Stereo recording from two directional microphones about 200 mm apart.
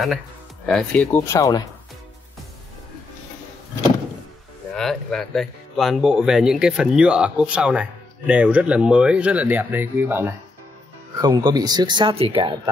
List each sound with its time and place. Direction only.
0.7 s speech: 5° left (ahead or behind)
4.7 s speech: centre (ahead or behind); by 12.5 s 25° right (ahead or behind)